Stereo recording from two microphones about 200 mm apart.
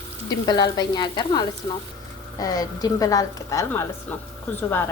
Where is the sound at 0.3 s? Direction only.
20° left (ahead or behind).